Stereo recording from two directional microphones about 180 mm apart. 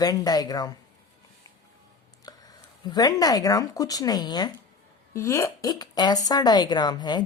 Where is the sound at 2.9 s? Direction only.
20° left (ahead or behind).